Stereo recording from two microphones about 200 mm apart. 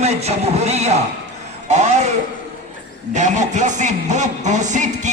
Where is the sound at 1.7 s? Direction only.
35° right (ahead or behind).